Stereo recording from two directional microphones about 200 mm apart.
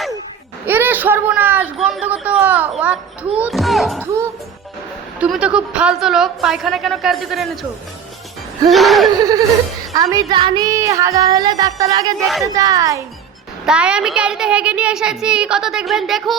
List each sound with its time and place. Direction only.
0.6 s a woman's voice: 10° right (ahead or behind)
5.2 s a woman's voice: 5° right (ahead or behind)
8.7 s a woman's voice: centre (ahead or behind)
9.1 s neigh: 20° right (ahead or behind)
9.9 s music: 15° right (ahead or behind)
12.2 s a woman's voice: centre (ahead or behind)
12.5 s music: 15° right (ahead or behind)
13.7 s a woman's voice: 5° right (ahead or behind)